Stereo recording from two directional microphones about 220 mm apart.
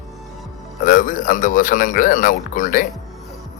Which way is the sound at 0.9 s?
35° left (ahead or behind).